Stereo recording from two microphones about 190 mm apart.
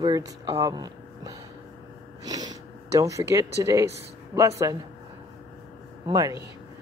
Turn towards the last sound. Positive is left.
turn(degrees=-20)  # may be behind; listen again after turning